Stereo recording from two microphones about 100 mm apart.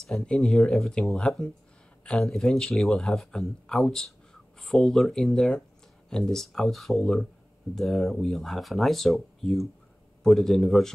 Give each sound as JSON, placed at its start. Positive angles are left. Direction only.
{"t": 0.0, "sound": "speech", "side_deg": 5}